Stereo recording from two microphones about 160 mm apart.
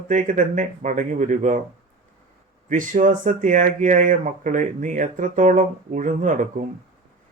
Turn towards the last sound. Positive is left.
turn(degrees=-50)  # may be behind; listen again after turning